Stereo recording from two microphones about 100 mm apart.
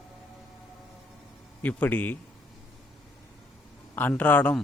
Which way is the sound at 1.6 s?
15° left (ahead or behind).